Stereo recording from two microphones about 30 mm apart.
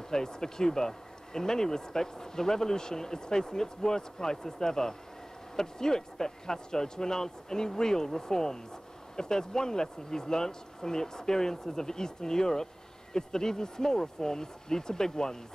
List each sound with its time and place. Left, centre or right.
0.1 s speech: centre